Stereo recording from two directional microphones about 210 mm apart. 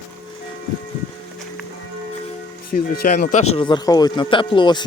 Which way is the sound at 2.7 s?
45° left (ahead or behind).